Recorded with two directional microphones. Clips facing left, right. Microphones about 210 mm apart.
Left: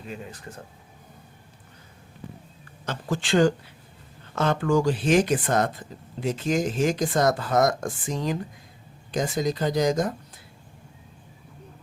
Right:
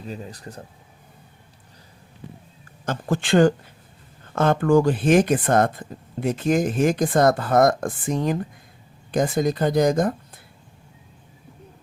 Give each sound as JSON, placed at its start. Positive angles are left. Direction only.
{"t": 0.1, "sound": "speech", "side_deg": -35}
{"t": 2.8, "sound": "speech", "side_deg": -50}